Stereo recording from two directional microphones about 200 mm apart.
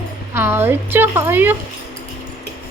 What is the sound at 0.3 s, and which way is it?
A woman's voice, 10° right (ahead or behind).